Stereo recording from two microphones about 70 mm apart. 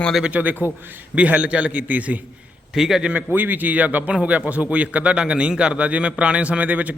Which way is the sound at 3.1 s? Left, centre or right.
Right.